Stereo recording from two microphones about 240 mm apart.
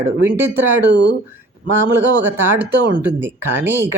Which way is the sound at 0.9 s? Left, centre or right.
Right.